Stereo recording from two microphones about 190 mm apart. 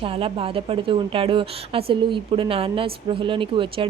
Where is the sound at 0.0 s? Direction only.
30° right (ahead or behind).